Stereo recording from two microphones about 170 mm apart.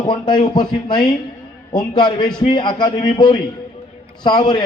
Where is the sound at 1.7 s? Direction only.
25° left (ahead or behind).